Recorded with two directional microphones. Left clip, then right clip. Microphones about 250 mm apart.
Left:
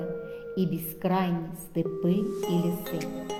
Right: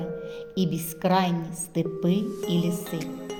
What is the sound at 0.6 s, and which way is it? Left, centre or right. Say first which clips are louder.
Speech: right 3 dB; right.